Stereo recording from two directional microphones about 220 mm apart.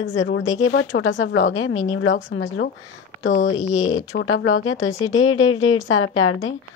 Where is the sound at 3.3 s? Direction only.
35° left (ahead or behind).